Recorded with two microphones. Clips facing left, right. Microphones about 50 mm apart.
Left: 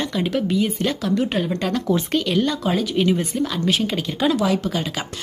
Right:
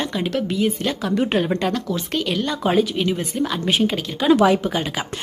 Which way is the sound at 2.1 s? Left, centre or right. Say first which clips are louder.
Left 2 dB; centre.